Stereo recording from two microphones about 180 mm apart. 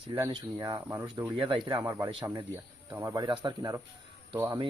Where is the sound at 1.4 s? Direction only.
30° right (ahead or behind).